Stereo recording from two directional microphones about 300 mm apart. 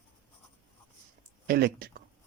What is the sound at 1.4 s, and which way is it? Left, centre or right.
Speech, right.